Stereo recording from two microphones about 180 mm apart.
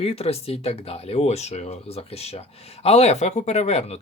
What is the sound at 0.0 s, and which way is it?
Speech, 35° left (ahead or behind).